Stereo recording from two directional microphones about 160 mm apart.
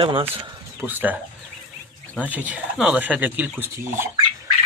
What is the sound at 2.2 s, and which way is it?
Speech, 10° right (ahead or behind).